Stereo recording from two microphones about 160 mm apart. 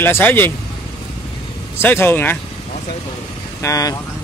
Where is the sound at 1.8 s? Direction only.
15° left (ahead or behind).